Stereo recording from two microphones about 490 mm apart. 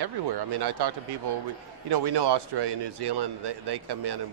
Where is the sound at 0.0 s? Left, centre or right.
Right.